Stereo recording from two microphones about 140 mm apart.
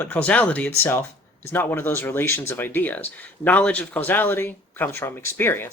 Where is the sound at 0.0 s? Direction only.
10° left (ahead or behind).